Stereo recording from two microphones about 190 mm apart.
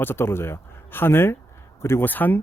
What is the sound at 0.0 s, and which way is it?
Speech, 10° left (ahead or behind).